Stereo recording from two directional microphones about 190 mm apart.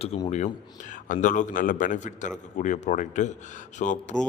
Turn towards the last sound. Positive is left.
turn(degrees=40)  # may be behind; listen again after turning